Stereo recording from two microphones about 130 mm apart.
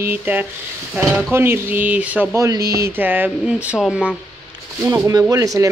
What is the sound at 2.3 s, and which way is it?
Speech, 25° right (ahead or behind).